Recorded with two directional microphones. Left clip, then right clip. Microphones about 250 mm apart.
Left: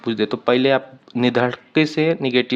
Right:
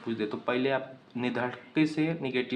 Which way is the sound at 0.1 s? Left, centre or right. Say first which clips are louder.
Left 12 dB; left.